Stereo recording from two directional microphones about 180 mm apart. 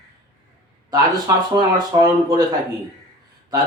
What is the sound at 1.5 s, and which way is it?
Speech, 20° right (ahead or behind).